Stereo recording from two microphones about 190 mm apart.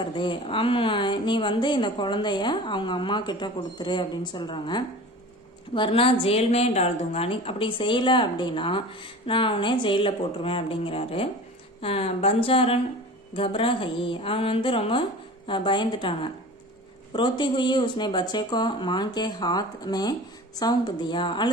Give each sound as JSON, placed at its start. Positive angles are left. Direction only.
{"t": 0.0, "sound": "a woman's voice", "side_deg": 25}